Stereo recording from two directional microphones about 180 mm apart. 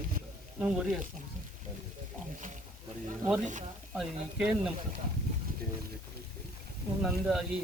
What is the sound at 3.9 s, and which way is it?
Speech, 5° right (ahead or behind).